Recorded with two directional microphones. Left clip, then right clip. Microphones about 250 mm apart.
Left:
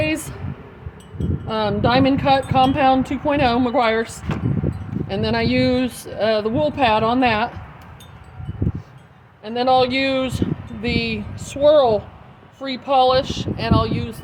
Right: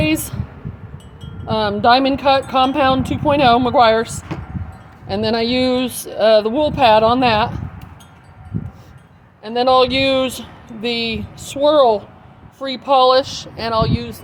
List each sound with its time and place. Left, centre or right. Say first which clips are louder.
0.0 s a sound: right 3 dB; right
1.5 s speech: right 6 dB; right
9.4 s speech: right 3 dB; right